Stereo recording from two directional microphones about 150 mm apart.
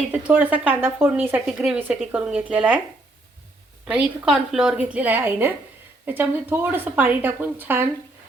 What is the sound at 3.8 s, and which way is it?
Speech, 5° right (ahead or behind).